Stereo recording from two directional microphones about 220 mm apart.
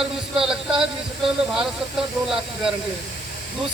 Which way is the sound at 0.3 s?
5° right (ahead or behind).